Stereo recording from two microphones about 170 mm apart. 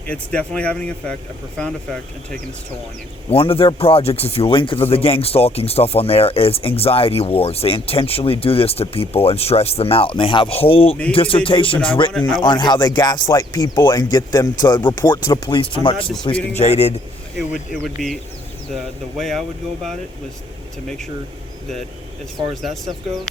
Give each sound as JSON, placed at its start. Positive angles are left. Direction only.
{"t": 0.1, "sound": "speech", "side_deg": 5}
{"t": 3.2, "sound": "a man's voice", "side_deg": 35}
{"t": 17.7, "sound": "speech", "side_deg": 0}
{"t": 22.6, "sound": "speech", "side_deg": 0}